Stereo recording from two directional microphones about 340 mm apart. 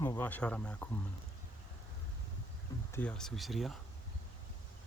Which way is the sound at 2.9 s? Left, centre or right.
Centre.